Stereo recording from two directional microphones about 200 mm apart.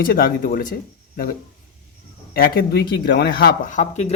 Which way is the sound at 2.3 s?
50° left (ahead or behind).